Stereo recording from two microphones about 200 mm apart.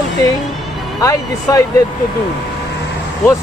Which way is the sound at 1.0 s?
15° left (ahead or behind).